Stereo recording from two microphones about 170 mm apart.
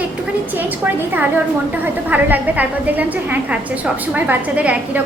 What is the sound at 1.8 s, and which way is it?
A woman's voice, 10° right (ahead or behind).